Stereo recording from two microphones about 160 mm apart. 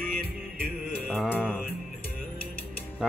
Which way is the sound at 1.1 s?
5° left (ahead or behind).